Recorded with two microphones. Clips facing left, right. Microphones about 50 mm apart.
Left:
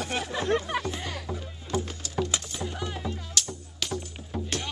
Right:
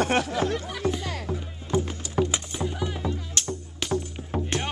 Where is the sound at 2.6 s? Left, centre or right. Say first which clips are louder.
Right 4 dB; centre.